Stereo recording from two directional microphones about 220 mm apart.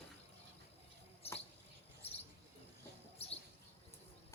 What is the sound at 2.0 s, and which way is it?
Cricket, 25° left (ahead or behind).